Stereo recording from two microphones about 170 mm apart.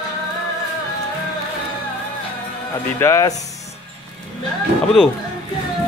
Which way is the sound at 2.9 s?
15° left (ahead or behind).